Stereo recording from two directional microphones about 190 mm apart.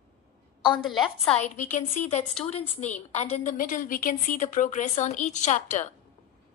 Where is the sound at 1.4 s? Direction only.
40° left (ahead or behind).